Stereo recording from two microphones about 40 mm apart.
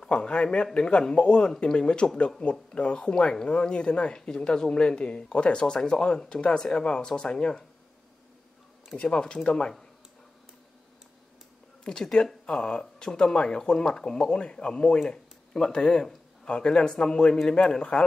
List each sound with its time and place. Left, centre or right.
0.0 s a sound: left
0.7 s speech: left
9.0 s speech: centre
11.8 s speech: centre